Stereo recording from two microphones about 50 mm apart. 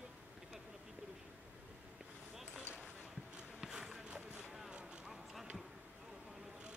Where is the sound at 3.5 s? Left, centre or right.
Centre.